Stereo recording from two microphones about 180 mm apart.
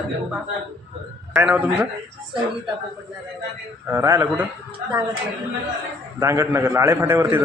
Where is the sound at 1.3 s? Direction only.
5° right (ahead or behind).